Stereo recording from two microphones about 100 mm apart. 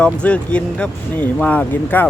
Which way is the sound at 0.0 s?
10° left (ahead or behind).